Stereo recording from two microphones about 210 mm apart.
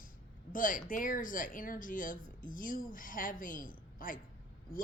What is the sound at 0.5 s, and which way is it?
A woman's voice, 40° left (ahead or behind).